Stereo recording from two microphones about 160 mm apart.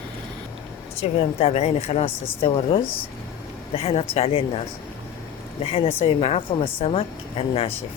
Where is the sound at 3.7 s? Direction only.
40° left (ahead or behind).